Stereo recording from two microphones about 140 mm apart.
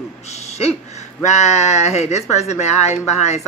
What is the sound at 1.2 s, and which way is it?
Speech, 55° left (ahead or behind).